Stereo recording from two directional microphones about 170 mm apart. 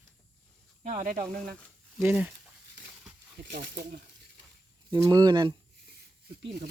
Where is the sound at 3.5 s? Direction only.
90° right.